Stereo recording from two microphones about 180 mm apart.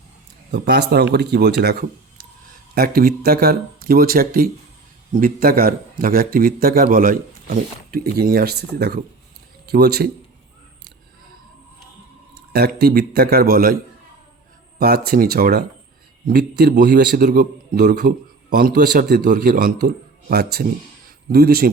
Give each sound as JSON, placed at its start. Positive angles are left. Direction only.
{"t": 0.5, "sound": "speech", "side_deg": -65}
{"t": 2.7, "sound": "a man's voice", "side_deg": -55}
{"t": 12.5, "sound": "speech", "side_deg": -60}
{"t": 14.8, "sound": "speech", "side_deg": -60}
{"t": 17.2, "sound": "a man's voice", "side_deg": -45}
{"t": 19.2, "sound": "a man's voice", "side_deg": -50}
{"t": 20.3, "sound": "speech", "side_deg": -60}